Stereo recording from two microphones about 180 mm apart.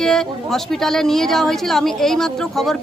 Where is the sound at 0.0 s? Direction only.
Centre (ahead or behind).